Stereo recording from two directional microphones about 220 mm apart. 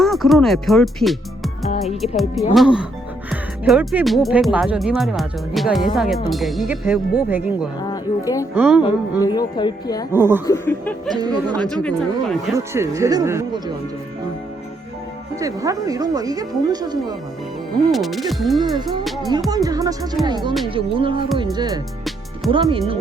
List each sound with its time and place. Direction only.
0.0 s speech: centre (ahead or behind)
7.8 s speech: 15° left (ahead or behind)
8.5 s speech: 5° right (ahead or behind)
9.2 s speech: 20° left (ahead or behind)
10.1 s speech: 10° right (ahead or behind)
10.4 s speech: 10° left (ahead or behind)
11.1 s music: 20° right (ahead or behind)
11.7 s speech: 5° left (ahead or behind)
12.5 s speech: 15° right (ahead or behind)
15.4 s speech: 15° right (ahead or behind)
17.9 s speech: centre (ahead or behind)
19.5 s speech: 15° right (ahead or behind)
20.2 s music: 20° right (ahead or behind)